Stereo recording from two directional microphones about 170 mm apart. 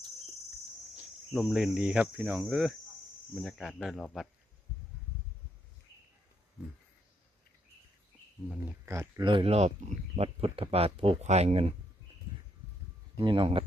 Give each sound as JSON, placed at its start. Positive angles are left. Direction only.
{"t": 1.3, "sound": "cricket", "side_deg": 0}
{"t": 8.9, "sound": "speech", "side_deg": -15}
{"t": 9.2, "sound": "speech", "side_deg": -30}
{"t": 13.1, "sound": "speech", "side_deg": -30}